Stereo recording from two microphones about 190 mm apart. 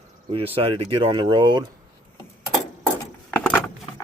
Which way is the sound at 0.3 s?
30° right (ahead or behind).